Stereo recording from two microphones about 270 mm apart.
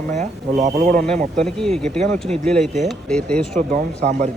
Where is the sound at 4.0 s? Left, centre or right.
Right.